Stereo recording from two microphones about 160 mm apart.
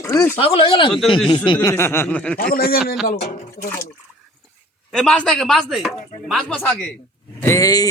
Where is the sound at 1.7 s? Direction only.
15° left (ahead or behind).